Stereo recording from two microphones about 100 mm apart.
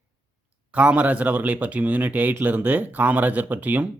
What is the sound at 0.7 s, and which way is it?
Speech, 15° right (ahead or behind).